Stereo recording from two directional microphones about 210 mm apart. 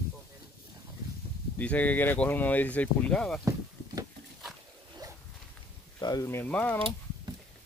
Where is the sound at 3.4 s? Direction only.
15° right (ahead or behind).